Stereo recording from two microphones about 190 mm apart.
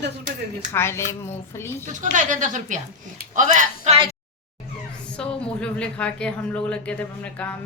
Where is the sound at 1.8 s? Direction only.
40° right (ahead or behind).